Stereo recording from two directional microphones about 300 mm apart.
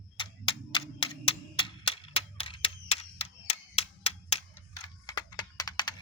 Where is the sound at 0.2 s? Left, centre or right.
Centre.